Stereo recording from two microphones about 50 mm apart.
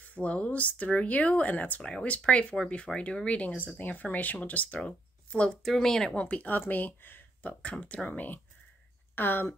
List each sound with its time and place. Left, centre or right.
0.0 s speech: left
1.8 s speech: centre
4.7 s speech: centre
5.6 s speech: centre
6.1 s speech: left
7.8 s speech: left